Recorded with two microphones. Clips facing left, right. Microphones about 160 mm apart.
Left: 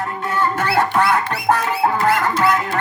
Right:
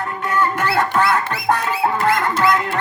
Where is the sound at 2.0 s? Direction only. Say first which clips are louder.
Left 1 dB; 35° left (ahead or behind).